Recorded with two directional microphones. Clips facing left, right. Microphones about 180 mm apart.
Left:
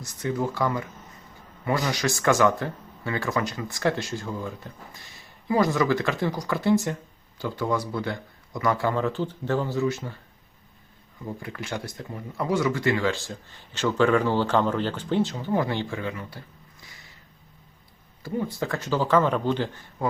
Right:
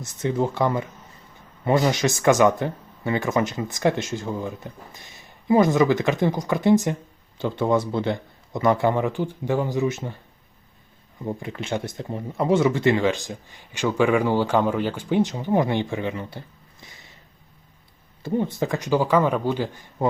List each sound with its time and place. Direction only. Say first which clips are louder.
0.0 s speech: right 4 dB; 25° right (ahead or behind)
11.3 s speech: right 5 dB; 25° right (ahead or behind)
18.2 s speech: right 5 dB; 25° right (ahead or behind)